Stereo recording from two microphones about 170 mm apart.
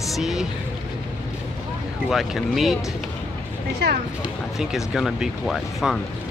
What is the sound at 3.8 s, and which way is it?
Speech, 90° right.